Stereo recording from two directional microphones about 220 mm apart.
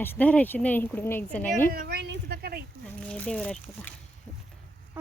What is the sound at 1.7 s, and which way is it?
Speech, 50° right (ahead or behind).